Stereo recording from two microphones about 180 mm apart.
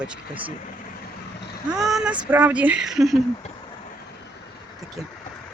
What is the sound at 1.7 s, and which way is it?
Speech, 5° right (ahead or behind).